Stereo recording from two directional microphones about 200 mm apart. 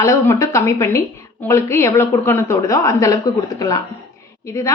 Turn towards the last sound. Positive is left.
turn(degrees=15)  # may be behind; listen again after turning